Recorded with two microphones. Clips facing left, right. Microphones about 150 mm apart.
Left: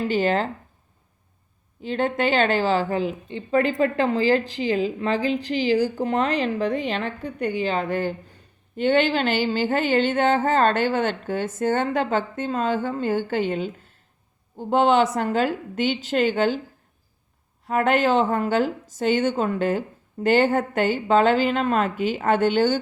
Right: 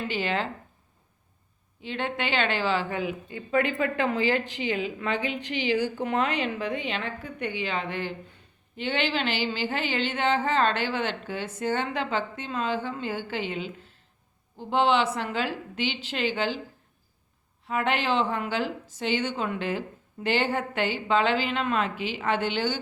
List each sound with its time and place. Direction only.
0.0 s a woman's voice: 40° left (ahead or behind)
1.8 s a woman's voice: 40° left (ahead or behind)
17.7 s speech: 45° left (ahead or behind)